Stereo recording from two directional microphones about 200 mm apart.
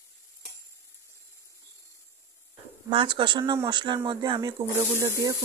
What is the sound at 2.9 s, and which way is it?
Speech, 25° right (ahead or behind).